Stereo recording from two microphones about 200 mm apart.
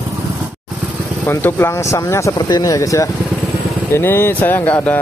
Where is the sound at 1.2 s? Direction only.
10° left (ahead or behind).